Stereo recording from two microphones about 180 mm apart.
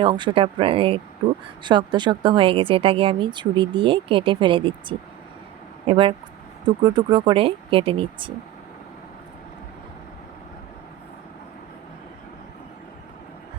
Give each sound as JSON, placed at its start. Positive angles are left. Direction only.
{"t": 0.0, "sound": "speech", "side_deg": -25}